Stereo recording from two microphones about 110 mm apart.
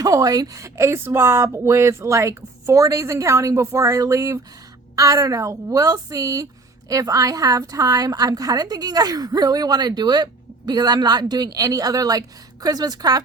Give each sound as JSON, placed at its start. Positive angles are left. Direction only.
{"t": 0.0, "sound": "a woman's voice", "side_deg": -35}